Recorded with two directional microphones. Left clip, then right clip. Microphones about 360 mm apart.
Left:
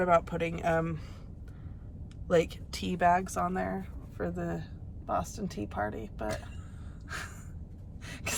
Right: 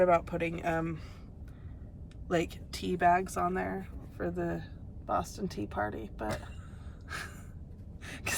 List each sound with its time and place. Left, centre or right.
0.0 s speech: centre
2.2 s speech: centre
8.0 s pant: centre